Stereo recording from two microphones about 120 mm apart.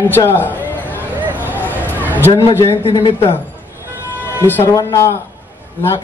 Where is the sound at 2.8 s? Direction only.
50° left (ahead or behind).